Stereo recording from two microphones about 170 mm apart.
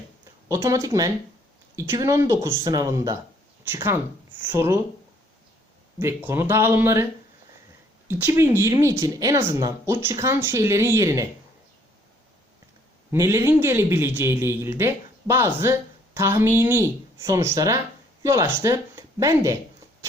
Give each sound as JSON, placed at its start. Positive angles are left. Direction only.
{"t": 0.4, "sound": "speech", "side_deg": -20}
{"t": 6.0, "sound": "speech", "side_deg": -15}
{"t": 8.0, "sound": "speech", "side_deg": -15}
{"t": 13.1, "sound": "speech", "side_deg": -20}